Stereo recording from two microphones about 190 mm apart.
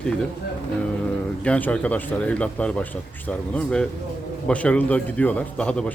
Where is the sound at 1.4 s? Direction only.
5° left (ahead or behind).